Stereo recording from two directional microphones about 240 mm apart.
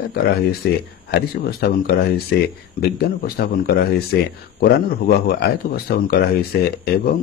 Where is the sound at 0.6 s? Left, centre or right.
Left.